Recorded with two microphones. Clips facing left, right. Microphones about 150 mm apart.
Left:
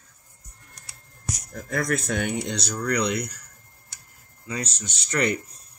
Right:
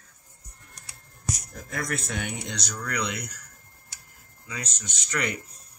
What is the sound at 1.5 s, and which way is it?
Speech, 50° left (ahead or behind).